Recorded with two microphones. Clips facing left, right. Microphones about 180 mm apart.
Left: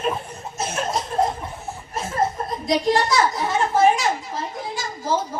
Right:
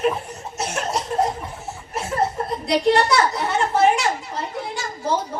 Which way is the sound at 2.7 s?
70° right (ahead or behind).